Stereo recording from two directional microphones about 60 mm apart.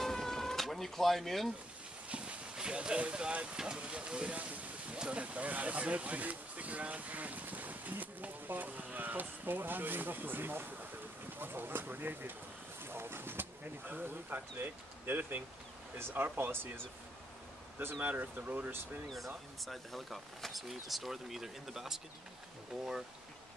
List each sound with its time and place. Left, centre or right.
0.0 s insect: centre
2.0 s a sound: centre
3.5 s speech: centre; by 16.8 s right
18.0 s speech: right
19.1 s speech: centre